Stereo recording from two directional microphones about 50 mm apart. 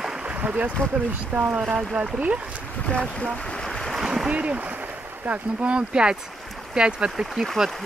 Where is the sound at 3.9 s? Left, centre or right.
Centre.